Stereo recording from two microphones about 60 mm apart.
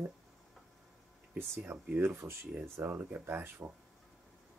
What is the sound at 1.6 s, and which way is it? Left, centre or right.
Speech, right.